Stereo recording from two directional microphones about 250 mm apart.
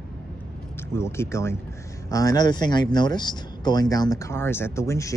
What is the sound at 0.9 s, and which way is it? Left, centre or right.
Speech, centre.